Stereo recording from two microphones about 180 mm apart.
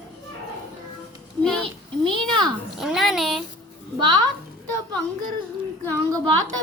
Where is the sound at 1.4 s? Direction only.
5° left (ahead or behind).